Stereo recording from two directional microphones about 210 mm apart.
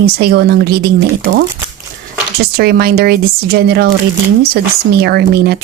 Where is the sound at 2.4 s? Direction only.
45° right (ahead or behind).